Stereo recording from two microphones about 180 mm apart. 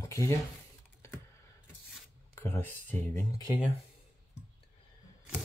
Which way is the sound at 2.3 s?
10° left (ahead or behind).